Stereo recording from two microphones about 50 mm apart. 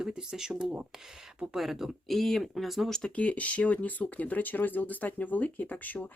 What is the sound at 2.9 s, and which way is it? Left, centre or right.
Speech, centre.